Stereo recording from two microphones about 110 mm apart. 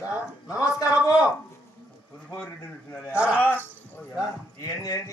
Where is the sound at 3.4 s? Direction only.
15° left (ahead or behind).